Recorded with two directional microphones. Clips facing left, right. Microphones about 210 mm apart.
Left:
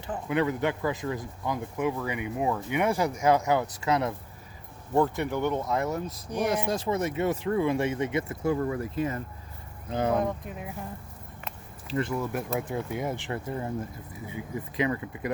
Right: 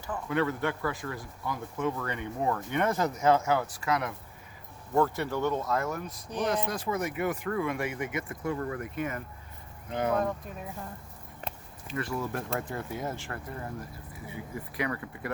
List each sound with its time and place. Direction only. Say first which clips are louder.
0.1 s speech: left 2 dB; 15° left (ahead or behind)
6.7 s speech: left 4 dB; 25° left (ahead or behind)
10.2 s speech: left 2 dB; 15° left (ahead or behind)
11.9 s speech: left 5 dB; 25° left (ahead or behind)
12.3 s speech: left 3 dB; 10° left (ahead or behind)